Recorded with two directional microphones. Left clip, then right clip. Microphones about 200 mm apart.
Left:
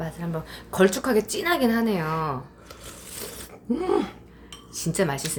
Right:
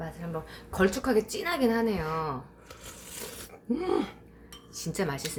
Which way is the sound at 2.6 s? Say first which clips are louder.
Left 4 dB; 5° right (ahead or behind).